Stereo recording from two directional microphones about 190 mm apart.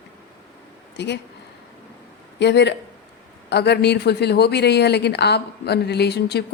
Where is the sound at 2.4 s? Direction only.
65° left (ahead or behind).